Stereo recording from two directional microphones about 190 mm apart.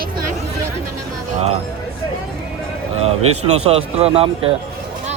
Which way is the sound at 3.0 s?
35° right (ahead or behind).